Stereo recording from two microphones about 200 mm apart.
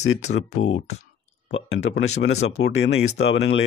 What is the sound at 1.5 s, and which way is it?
Speech, 70° left (ahead or behind).